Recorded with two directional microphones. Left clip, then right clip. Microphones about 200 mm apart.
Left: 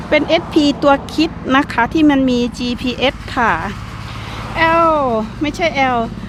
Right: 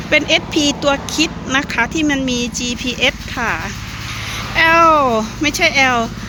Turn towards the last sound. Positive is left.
turn(degrees=10)  # may be behind; listen again after turning